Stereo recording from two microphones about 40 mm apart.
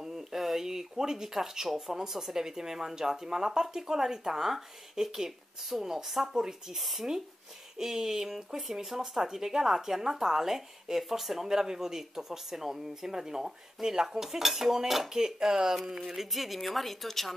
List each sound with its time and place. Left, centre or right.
0.0 s speech: centre
6.3 s speech: centre
6.8 s a woman's voice: centre
16.2 s a woman's voice: centre